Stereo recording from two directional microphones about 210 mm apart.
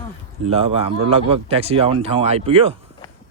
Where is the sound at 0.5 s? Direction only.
30° right (ahead or behind).